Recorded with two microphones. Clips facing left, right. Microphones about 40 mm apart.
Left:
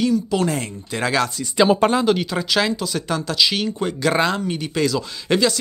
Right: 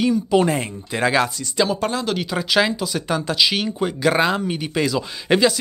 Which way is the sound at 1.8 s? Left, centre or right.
Left.